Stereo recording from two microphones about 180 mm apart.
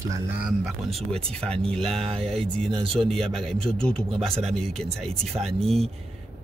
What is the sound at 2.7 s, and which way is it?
Speech, 30° right (ahead or behind).